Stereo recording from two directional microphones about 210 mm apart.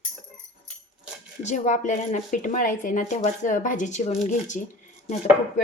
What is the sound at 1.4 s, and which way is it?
Speech, 35° left (ahead or behind).